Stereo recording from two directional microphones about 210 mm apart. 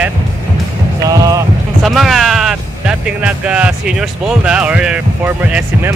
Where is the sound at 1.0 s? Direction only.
15° right (ahead or behind).